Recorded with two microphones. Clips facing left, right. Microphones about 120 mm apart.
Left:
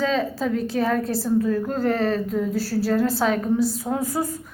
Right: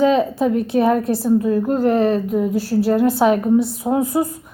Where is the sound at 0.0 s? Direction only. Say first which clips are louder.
Right 7 dB; 20° right (ahead or behind).